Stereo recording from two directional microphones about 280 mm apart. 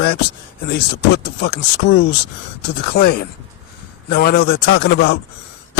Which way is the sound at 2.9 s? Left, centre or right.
Left.